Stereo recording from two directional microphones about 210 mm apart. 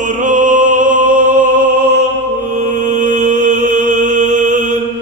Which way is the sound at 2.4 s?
35° right (ahead or behind).